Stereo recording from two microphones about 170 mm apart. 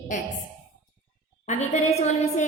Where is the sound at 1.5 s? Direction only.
40° left (ahead or behind).